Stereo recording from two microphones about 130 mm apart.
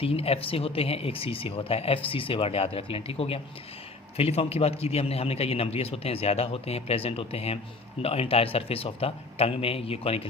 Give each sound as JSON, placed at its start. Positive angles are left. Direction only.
{"t": 0.0, "sound": "speech", "side_deg": 50}